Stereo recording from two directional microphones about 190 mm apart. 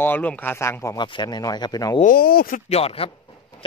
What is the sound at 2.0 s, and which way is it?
Speech, 50° left (ahead or behind).